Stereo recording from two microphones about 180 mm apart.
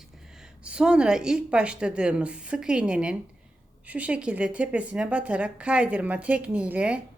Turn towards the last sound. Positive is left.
turn(degrees=-5)  # may be behind; listen again after turning